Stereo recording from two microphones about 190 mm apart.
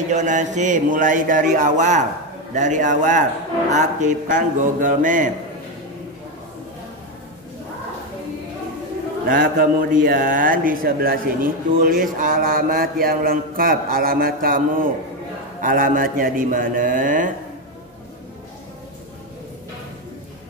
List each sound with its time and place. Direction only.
0.1 s mantra: 40° right (ahead or behind)
9.3 s a man's voice: 45° right (ahead or behind)